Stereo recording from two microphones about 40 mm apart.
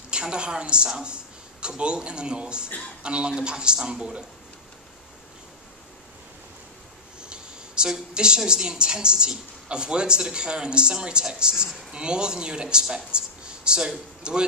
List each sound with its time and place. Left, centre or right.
0.1 s a woman's voice: right
7.2 s a sound: right
8.1 s a woman's voice: right